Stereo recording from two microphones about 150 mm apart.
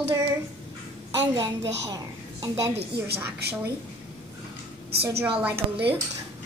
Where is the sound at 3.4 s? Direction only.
90° right.